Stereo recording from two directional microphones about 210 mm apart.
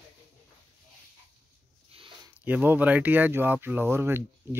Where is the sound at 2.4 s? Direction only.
10° right (ahead or behind).